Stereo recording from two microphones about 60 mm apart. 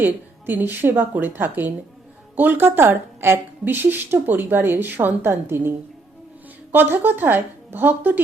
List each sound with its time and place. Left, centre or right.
0.0 s a woman's voice: right